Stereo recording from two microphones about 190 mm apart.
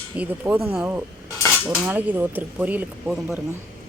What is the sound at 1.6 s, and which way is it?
Speech, 10° right (ahead or behind).